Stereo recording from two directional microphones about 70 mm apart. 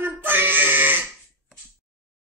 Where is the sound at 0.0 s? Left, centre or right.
Right.